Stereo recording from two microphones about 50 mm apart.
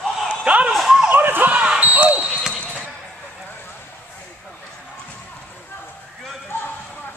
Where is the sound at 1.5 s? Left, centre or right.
Right.